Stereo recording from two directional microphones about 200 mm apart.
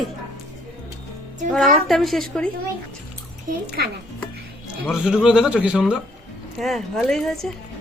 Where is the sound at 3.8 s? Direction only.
55° right (ahead or behind).